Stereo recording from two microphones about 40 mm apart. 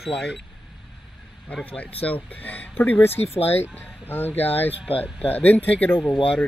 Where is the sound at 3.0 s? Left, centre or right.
Left.